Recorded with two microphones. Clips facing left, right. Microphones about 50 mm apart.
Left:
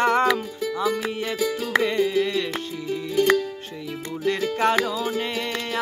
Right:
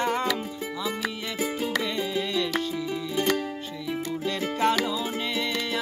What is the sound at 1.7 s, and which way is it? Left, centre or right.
Music, left.